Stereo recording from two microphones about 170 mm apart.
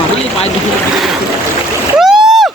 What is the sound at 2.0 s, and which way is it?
Splash, centre (ahead or behind).